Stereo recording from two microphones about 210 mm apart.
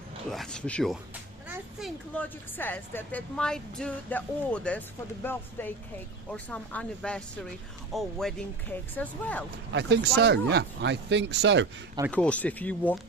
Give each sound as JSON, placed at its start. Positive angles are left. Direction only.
{"t": 0.3, "sound": "speech", "side_deg": 0}
{"t": 1.5, "sound": "children playing", "side_deg": -10}
{"t": 2.1, "sound": "a woman's voice", "side_deg": 10}
{"t": 9.7, "sound": "speech", "side_deg": -55}
{"t": 12.1, "sound": "a woman's voice", "side_deg": 5}